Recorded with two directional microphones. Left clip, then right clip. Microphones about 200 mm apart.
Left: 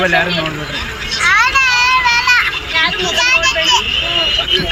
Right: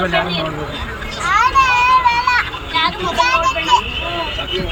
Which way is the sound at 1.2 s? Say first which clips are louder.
Left 2 dB; 10° right (ahead or behind).